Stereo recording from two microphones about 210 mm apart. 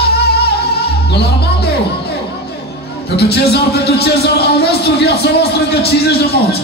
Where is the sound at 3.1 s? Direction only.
50° left (ahead or behind).